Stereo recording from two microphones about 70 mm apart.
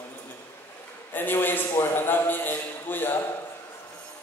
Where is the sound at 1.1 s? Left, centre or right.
Left.